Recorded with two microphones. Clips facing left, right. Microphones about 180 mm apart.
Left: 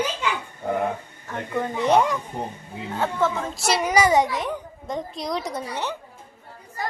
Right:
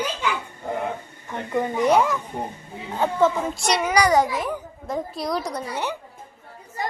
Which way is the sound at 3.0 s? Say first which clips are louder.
Right 4 dB; 15° right (ahead or behind).